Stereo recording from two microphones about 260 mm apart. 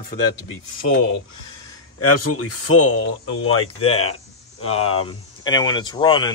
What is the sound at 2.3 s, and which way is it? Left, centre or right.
Speech, left.